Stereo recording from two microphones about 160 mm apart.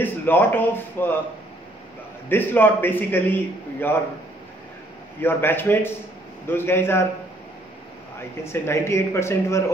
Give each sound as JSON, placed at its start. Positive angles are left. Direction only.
{"t": 0.0, "sound": "a man's voice", "side_deg": 15}
{"t": 2.2, "sound": "a man's voice", "side_deg": 15}
{"t": 5.2, "sound": "a man's voice", "side_deg": 15}
{"t": 8.5, "sound": "a man's voice", "side_deg": 15}